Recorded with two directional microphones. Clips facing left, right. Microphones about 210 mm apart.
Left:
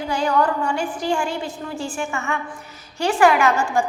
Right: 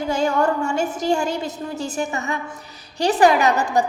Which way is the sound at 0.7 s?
45° right (ahead or behind).